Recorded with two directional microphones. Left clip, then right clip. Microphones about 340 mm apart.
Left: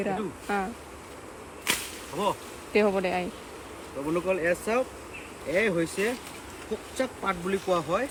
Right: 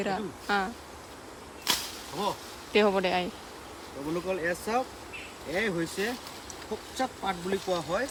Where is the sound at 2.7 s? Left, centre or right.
Centre.